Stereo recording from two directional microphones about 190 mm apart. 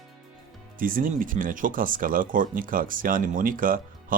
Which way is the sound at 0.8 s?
45° right (ahead or behind).